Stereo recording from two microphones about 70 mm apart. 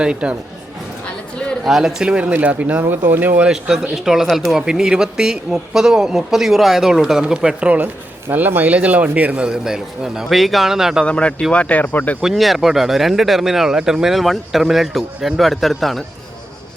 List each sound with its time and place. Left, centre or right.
0.0 s speech: centre
1.6 s speech: centre; by 3.4 s right
3.4 s speech: centre
8.3 s speech: right; by 11.0 s centre
11.0 s speech: centre
12.2 s speech: centre